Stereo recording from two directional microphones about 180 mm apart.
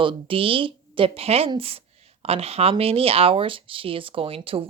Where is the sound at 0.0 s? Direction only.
30° right (ahead or behind).